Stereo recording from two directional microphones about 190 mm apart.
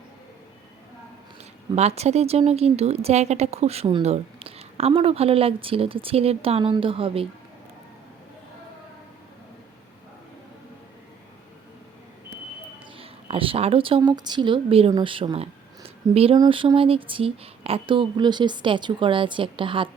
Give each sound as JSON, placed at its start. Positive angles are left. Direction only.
{"t": 1.7, "sound": "speech", "side_deg": -35}
{"t": 13.0, "sound": "speech", "side_deg": -30}